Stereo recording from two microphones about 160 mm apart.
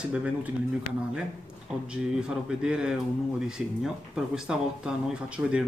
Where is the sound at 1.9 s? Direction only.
5° right (ahead or behind).